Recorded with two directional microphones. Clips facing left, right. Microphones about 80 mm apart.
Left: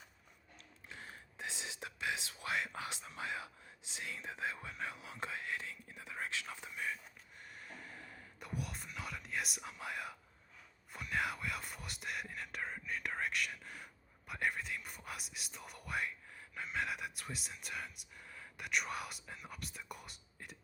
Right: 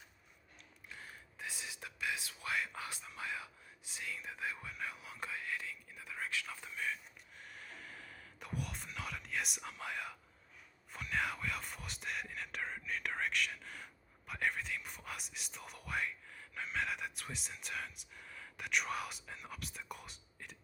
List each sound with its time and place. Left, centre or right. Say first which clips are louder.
0.9 s whispering: left 1 dB; left
8.4 s whispering: even; centre
16.6 s speech: right 1 dB; centre